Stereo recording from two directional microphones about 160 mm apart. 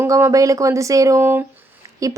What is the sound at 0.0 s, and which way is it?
Speech, 20° right (ahead or behind).